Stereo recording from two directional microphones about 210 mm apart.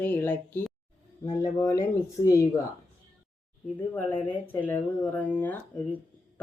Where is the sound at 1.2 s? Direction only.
25° left (ahead or behind).